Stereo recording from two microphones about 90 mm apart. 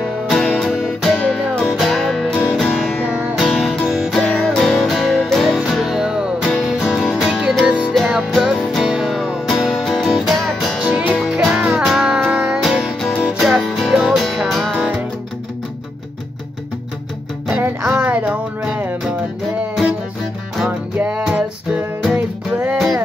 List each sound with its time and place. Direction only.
0.0 s guitar: 5° left (ahead or behind)
1.6 s music: centre (ahead or behind)
2.7 s music: 5° right (ahead or behind)
3.3 s music: centre (ahead or behind)
13.0 s music: 15° left (ahead or behind)
13.3 s music: 5° right (ahead or behind)
17.6 s music: 20° right (ahead or behind)
21.1 s music: 10° right (ahead or behind)